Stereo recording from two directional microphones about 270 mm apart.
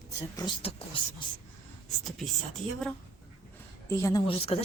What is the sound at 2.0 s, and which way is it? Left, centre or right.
Speech, centre.